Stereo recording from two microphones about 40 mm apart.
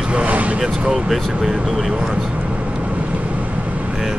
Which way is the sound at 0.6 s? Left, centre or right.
Centre.